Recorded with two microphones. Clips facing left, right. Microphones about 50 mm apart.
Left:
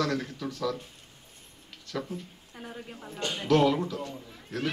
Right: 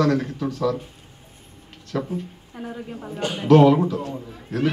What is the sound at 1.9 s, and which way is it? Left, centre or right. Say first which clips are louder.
A man's voice: right 8 dB; centre.